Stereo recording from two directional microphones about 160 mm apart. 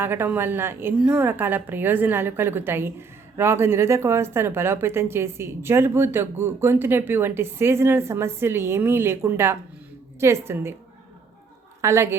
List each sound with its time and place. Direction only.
0.0 s a woman's voice: 15° right (ahead or behind)
11.8 s a woman's voice: 20° right (ahead or behind)